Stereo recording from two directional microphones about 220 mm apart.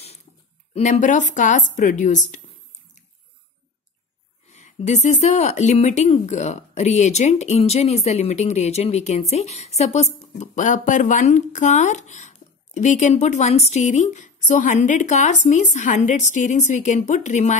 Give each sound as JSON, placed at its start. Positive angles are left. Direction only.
{"t": 0.7, "sound": "speech", "side_deg": 30}
{"t": 4.5, "sound": "speech", "side_deg": 30}